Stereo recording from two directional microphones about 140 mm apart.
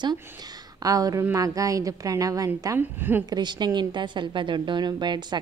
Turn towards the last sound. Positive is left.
turn(degrees=-30)  # may be behind; listen again after turning